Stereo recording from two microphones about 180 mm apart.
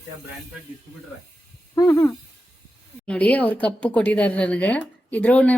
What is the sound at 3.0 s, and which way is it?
Speech, 5° left (ahead or behind).